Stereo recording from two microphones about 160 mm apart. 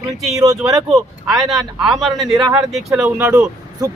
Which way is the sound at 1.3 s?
Centre (ahead or behind).